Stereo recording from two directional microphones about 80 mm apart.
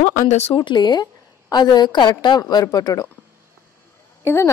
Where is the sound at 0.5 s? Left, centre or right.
Left.